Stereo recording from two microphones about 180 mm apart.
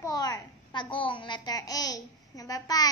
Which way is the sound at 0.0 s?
20° left (ahead or behind).